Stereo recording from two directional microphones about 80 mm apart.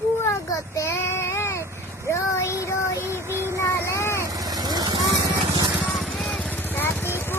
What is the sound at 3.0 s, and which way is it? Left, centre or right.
Child singing, right.